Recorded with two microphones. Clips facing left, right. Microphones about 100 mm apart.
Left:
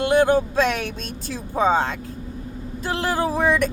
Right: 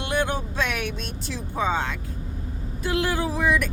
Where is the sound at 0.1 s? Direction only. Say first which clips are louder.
Left 8 dB; 40° left (ahead or behind).